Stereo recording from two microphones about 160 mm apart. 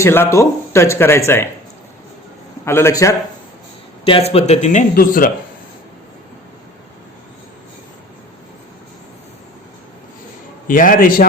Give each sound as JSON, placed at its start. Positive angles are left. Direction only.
{"t": 0.0, "sound": "speech", "side_deg": 15}
{"t": 2.6, "sound": "speech", "side_deg": 15}
{"t": 4.0, "sound": "a man's voice", "side_deg": 35}
{"t": 4.9, "sound": "a man's voice", "side_deg": 60}
{"t": 10.7, "sound": "a man's voice", "side_deg": 60}